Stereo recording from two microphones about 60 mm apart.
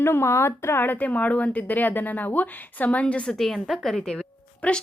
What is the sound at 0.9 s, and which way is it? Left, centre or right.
Speech, left.